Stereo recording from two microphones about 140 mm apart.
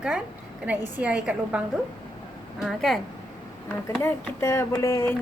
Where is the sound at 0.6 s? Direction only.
10° right (ahead or behind).